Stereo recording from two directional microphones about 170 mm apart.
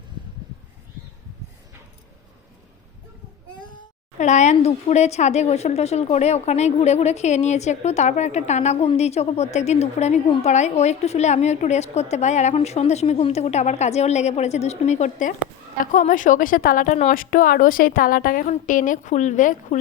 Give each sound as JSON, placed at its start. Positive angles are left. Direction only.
{"t": 4.2, "sound": "a woman's voice", "side_deg": 45}